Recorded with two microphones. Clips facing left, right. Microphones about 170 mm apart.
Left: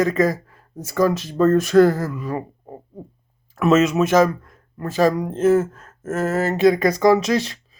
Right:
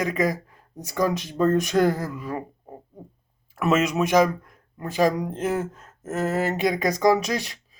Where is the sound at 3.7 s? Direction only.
10° right (ahead or behind).